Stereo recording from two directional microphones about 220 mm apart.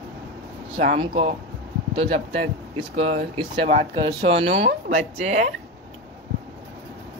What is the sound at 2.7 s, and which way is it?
Speech, 30° right (ahead or behind).